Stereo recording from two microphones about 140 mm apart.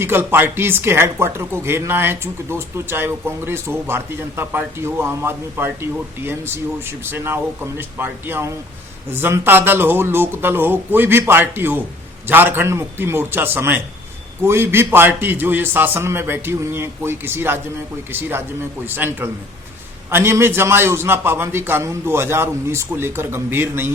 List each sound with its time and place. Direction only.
0.0 s speech: 15° right (ahead or behind)